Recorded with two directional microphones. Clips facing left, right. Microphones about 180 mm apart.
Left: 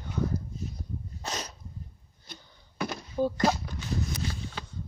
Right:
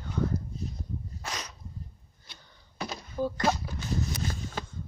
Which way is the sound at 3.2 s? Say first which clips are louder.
Left 3 dB; 25° left (ahead or behind).